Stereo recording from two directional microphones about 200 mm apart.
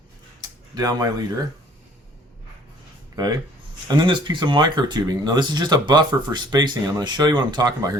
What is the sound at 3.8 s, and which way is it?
Speech, 20° right (ahead or behind).